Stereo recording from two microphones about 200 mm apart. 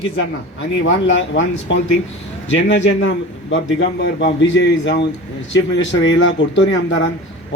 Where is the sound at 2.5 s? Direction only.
65° left (ahead or behind).